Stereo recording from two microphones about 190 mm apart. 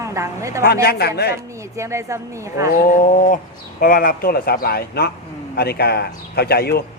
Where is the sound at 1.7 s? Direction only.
15° right (ahead or behind).